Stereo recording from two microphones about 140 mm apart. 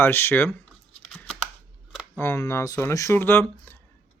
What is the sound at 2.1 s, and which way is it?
Speech, 15° left (ahead or behind).